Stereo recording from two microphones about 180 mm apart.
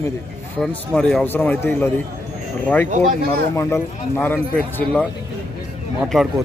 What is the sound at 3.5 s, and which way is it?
Speech, 15° left (ahead or behind).